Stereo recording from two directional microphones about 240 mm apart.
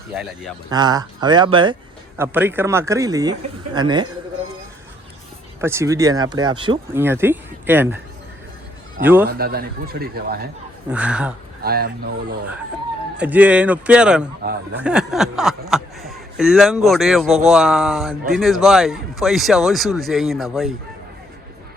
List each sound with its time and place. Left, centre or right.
0.1 s speech: centre
0.7 s speech: centre
2.1 s a man's voice: centre
5.5 s speech: centre
7.0 s speech: centre
9.0 s a man's voice: centre
9.2 s speech: right
10.8 s speech: centre
11.6 s speech: right
13.1 s speech: centre